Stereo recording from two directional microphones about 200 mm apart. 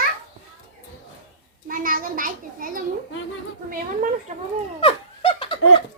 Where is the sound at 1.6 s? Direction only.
45° right (ahead or behind).